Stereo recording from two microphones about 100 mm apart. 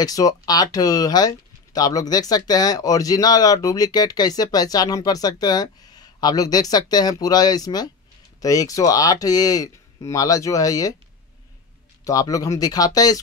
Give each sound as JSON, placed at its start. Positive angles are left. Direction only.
{"t": 0.0, "sound": "speech", "side_deg": 35}
{"t": 12.0, "sound": "speech", "side_deg": 35}